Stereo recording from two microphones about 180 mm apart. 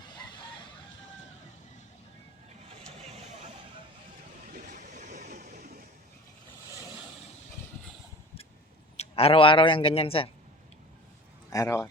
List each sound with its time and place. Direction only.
4.5 s vehicle: 45° right (ahead or behind)
9.0 s a man's voice: 35° left (ahead or behind)
11.5 s speech: 15° left (ahead or behind)